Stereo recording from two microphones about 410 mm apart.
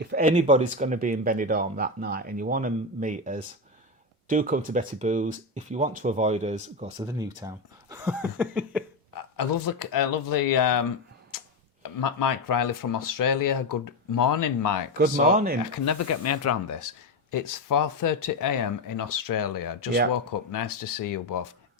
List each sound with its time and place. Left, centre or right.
0.0 s speech: right; by 8.8 s centre
9.3 s speech: left
11.8 s speech: left
14.9 s speech: centre
15.8 s speech: left
17.3 s speech: left